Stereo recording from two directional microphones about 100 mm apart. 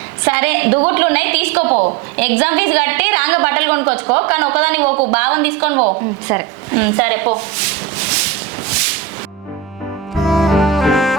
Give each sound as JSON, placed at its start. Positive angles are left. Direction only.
{"t": 0.3, "sound": "a woman's voice", "side_deg": -20}
{"t": 6.2, "sound": "a sound", "side_deg": -25}
{"t": 10.2, "sound": "music", "side_deg": 0}